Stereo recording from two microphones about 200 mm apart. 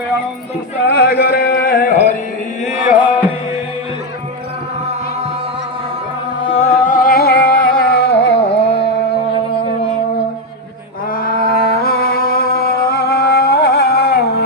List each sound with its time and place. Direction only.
0.9 s music: 55° left (ahead or behind)
2.8 s music: 5° right (ahead or behind)
6.5 s music: 35° left (ahead or behind); by 8.4 s 60° left (ahead or behind)
8.4 s carnatic music: 30° left (ahead or behind)
11.1 s music: 45° left (ahead or behind)